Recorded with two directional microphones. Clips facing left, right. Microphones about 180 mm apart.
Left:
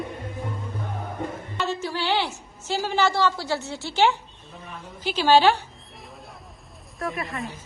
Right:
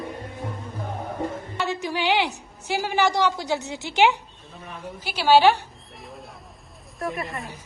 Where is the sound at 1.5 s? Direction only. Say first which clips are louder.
Left 1 dB; 15° right (ahead or behind).